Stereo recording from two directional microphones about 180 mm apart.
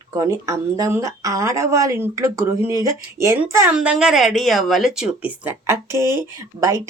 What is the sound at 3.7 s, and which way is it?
Speech, 5° right (ahead or behind).